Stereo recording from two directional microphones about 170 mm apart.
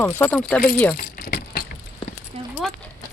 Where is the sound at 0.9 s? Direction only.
60° left (ahead or behind).